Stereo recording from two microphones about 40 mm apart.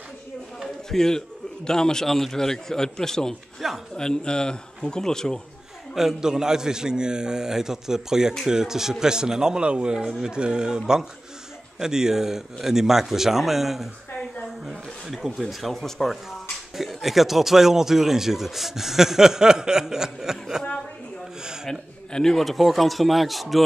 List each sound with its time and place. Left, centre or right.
0.8 s a man's voice: centre
2.0 s a man's voice: centre
5.9 s a man's voice: centre
11.8 s speech: centre
15.4 s a man's voice: centre
21.6 s a man's voice: centre